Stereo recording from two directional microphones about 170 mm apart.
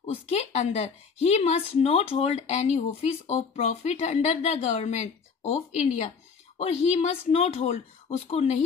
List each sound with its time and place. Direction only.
0.0 s a woman's voice: 40° left (ahead or behind)